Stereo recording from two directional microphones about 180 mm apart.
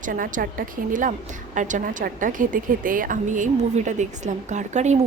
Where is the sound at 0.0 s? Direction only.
45° right (ahead or behind).